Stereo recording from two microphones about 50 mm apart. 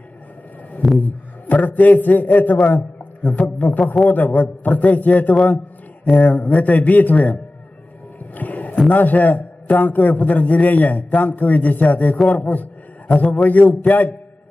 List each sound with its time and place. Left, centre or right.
0.9 s a man's voice: left
8.4 s a sound: left
8.8 s a man's voice: left